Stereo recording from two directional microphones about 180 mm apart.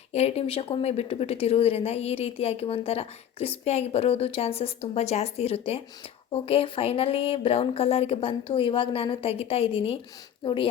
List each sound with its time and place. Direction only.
0.1 s a woman's voice: 35° left (ahead or behind)